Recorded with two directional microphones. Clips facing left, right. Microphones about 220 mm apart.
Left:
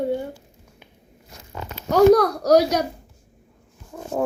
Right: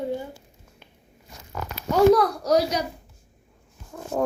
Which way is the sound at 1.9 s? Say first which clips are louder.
Left 3 dB; 40° left (ahead or behind).